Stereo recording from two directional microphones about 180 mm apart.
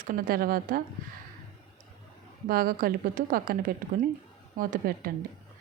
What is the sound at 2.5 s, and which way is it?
A woman's voice, 55° right (ahead or behind).